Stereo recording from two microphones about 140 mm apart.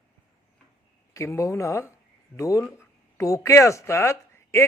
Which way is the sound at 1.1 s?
20° left (ahead or behind).